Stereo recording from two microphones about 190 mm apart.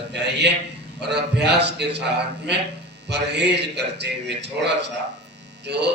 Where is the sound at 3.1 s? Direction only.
60° right (ahead or behind).